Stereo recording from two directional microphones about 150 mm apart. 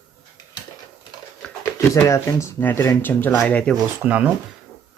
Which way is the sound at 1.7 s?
20° left (ahead or behind).